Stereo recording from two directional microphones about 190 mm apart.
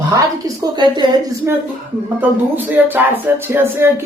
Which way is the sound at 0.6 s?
20° right (ahead or behind).